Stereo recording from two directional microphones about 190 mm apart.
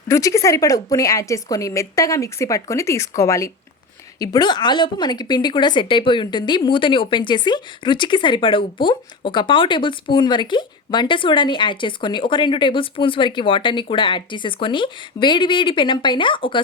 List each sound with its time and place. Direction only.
0.1 s a woman's voice: 15° left (ahead or behind)